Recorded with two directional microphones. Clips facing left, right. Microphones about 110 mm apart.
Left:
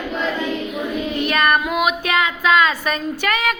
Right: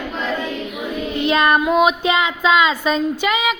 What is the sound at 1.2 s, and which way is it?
Child singing, 20° right (ahead or behind).